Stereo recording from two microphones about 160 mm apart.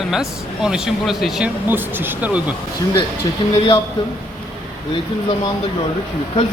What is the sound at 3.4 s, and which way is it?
Speech, 35° left (ahead or behind).